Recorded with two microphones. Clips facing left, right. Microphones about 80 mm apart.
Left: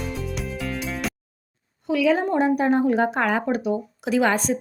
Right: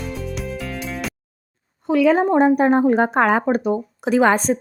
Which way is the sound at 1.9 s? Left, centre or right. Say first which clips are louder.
Right 5 dB; right.